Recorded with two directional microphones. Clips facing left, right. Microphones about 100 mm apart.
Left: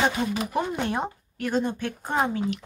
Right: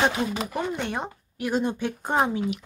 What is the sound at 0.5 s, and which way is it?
Speech, 5° left (ahead or behind).